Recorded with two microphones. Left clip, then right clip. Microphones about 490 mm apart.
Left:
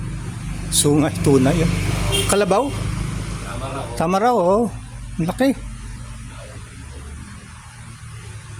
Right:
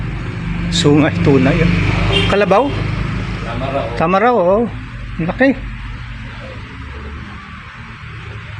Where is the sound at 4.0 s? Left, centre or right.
Left.